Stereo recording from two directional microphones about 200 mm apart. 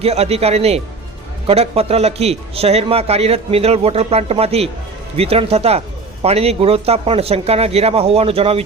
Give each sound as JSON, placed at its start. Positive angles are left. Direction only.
{"t": 0.0, "sound": "a man's voice", "side_deg": -30}